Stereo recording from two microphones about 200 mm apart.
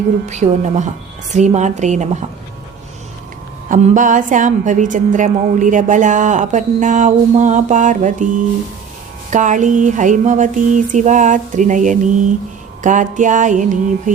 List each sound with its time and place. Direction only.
0.3 s a woman's voice: 35° right (ahead or behind)
3.7 s a woman's voice: 40° right (ahead or behind)
9.3 s a woman's voice: 40° right (ahead or behind)